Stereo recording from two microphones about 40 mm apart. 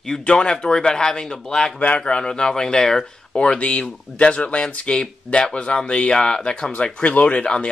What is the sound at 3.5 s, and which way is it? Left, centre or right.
Speech, left.